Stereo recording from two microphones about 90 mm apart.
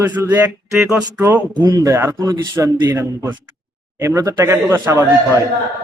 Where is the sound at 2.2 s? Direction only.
50° right (ahead or behind).